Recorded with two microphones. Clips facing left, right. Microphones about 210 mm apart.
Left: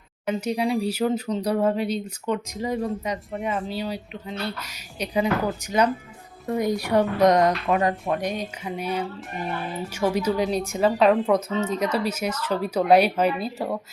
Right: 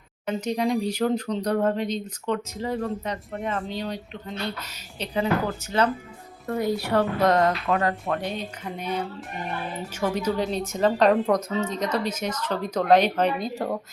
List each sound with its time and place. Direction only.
0.3 s a woman's voice: 10° left (ahead or behind)